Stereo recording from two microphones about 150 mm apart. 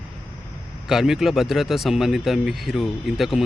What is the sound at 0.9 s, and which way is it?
Speech, centre (ahead or behind).